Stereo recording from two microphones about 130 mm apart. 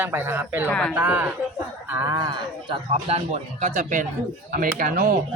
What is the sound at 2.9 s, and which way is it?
Speech, 55° right (ahead or behind).